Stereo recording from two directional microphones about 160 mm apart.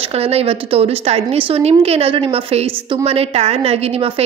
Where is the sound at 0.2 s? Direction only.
40° right (ahead or behind).